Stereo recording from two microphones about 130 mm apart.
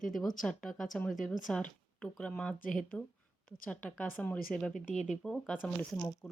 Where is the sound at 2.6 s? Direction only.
90° left.